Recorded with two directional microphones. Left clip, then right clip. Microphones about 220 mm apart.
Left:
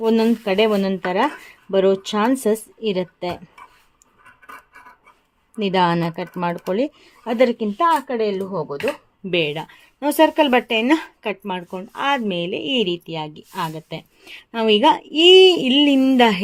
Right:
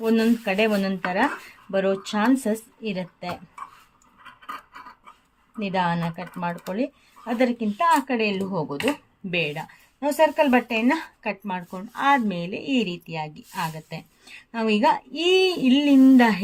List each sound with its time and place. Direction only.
0.0 s speech: 30° left (ahead or behind)
5.5 s speech: 40° left (ahead or behind); by 8.3 s 20° left (ahead or behind)
8.4 s speech: 5° left (ahead or behind)
9.3 s speech: 35° left (ahead or behind)